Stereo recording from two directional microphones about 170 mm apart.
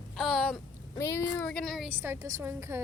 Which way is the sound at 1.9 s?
10° right (ahead or behind).